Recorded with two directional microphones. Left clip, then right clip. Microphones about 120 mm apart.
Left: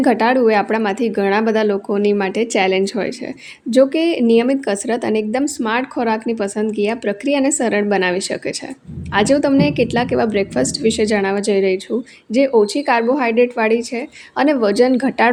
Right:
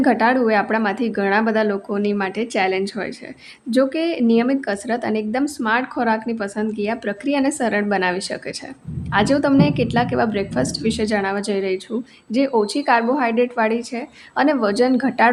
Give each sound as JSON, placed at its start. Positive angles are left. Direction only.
{"t": 0.0, "sound": "a woman's voice", "side_deg": 40}